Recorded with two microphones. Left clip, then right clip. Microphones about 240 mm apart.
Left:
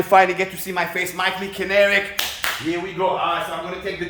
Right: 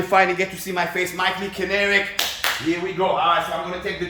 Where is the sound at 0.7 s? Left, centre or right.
Centre.